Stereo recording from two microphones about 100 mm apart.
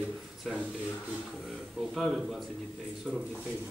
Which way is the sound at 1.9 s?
Centre (ahead or behind).